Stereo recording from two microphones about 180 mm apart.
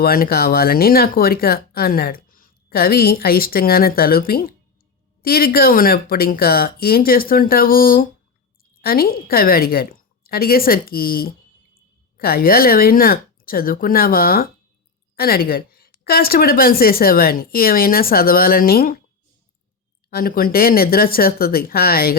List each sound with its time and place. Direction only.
0.0 s speech: 55° left (ahead or behind)
20.1 s speech: 55° left (ahead or behind)